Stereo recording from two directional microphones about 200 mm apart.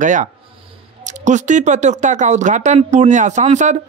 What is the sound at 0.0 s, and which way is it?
A man's voice, 40° right (ahead or behind).